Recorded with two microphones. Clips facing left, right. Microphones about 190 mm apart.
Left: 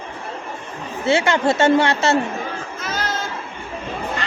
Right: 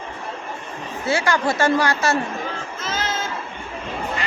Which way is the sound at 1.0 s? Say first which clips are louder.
Left 4 dB; 25° left (ahead or behind).